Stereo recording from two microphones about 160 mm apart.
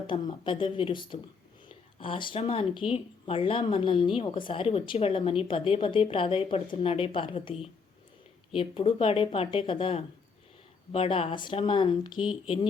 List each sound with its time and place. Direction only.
0.1 s speech: 30° left (ahead or behind)